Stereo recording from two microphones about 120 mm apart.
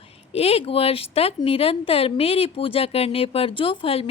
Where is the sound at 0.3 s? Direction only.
55° left (ahead or behind).